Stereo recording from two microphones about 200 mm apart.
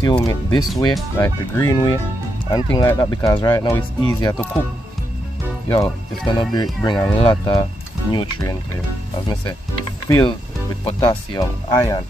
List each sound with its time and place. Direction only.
0.0 s speech: 20° left (ahead or behind)
5.7 s speech: 20° left (ahead or behind)
10.0 s speech: 15° left (ahead or behind)